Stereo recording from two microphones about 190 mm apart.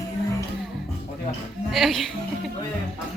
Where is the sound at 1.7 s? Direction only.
Centre (ahead or behind).